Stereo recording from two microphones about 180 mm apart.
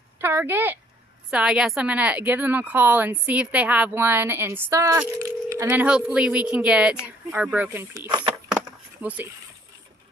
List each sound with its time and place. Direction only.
0.2 s a woman's voice: 10° right (ahead or behind)
7.9 s speech: 20° right (ahead or behind)
9.0 s speech: 10° right (ahead or behind)